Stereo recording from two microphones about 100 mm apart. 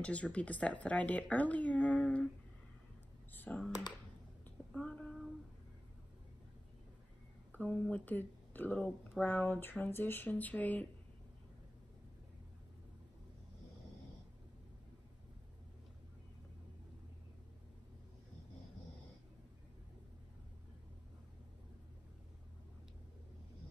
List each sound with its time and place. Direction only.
0.0 s speech: 15° left (ahead or behind)
3.3 s speech: 10° left (ahead or behind)
4.7 s a sound: 10° left (ahead or behind)
7.5 s speech: 15° left (ahead or behind)